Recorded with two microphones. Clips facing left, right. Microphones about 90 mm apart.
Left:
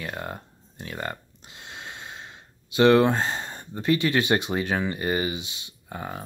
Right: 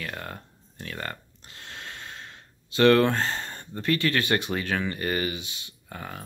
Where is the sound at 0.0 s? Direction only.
20° left (ahead or behind).